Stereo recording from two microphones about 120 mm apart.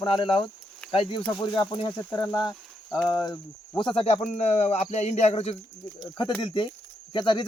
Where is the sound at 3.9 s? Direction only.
50° left (ahead or behind).